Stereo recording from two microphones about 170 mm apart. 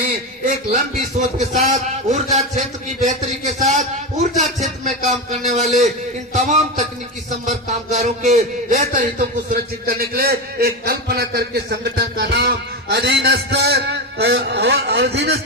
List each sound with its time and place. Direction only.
0.4 s a man's voice: 45° right (ahead or behind)
7.3 s music: 45° right (ahead or behind); by 15.4 s 85° right